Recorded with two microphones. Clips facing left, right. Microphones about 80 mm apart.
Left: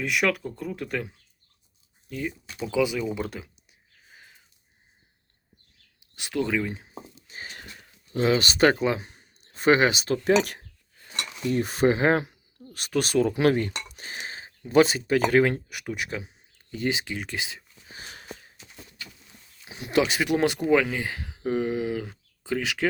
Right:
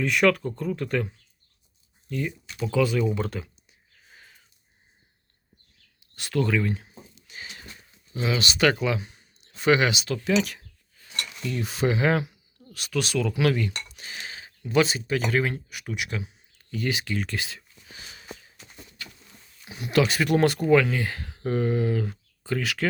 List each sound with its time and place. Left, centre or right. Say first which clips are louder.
0.0 s speech: right 4 dB; centre
2.7 s a sound: right 2 dB; centre
6.1 s speech: right 2 dB; centre
7.2 s sniff: left 1 dB; left
7.5 s speech: left 2 dB; left
10.9 s a sound: left 1 dB; left
11.6 s speech: left 2 dB; left
13.8 s a sound: left 2 dB; left
14.8 s speech: left 4 dB; left
16.0 s speech: even; left
18.1 s sniff: right 1 dB; left
19.6 s speech: right 1 dB; centre
22.1 s a sound: even; centre